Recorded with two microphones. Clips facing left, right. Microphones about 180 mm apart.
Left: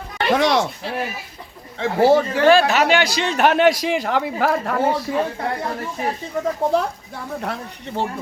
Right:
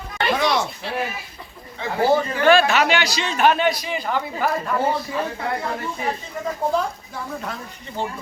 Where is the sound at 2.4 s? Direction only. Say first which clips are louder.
Right 1 dB; 35° left (ahead or behind); by 5.0 s 85° left.